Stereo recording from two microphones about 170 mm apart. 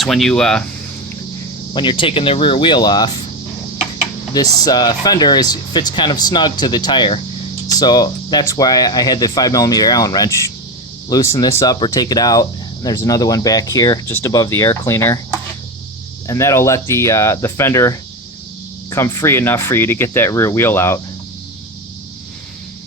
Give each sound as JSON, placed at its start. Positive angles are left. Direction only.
{"t": 0.0, "sound": "speech", "side_deg": 0}
{"t": 1.7, "sound": "speech", "side_deg": 30}
{"t": 4.4, "sound": "speech", "side_deg": 20}
{"t": 16.2, "sound": "speech", "side_deg": 20}